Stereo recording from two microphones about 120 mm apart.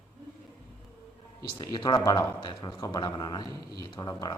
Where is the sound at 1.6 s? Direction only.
35° left (ahead or behind).